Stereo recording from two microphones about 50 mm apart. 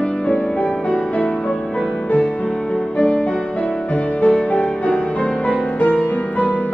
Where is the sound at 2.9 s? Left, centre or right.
Left.